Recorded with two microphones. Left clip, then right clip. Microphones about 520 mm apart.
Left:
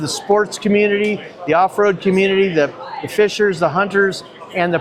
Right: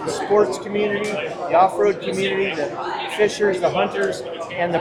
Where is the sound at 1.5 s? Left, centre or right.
Left.